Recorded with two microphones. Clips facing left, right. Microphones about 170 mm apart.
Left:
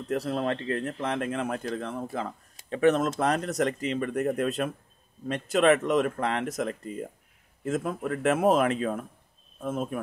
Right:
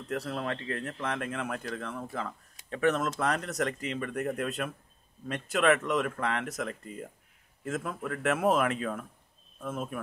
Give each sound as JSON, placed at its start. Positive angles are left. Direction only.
{"t": 0.1, "sound": "speech", "side_deg": 30}